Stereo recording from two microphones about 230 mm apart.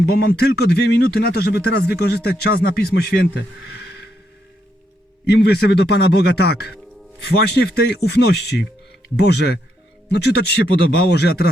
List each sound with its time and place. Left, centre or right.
0.0 s speech: left
5.3 s speech: left